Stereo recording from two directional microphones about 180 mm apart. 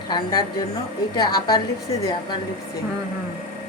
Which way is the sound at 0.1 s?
20° left (ahead or behind).